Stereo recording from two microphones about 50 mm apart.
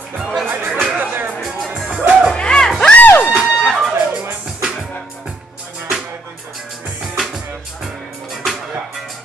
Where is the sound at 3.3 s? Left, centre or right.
Centre.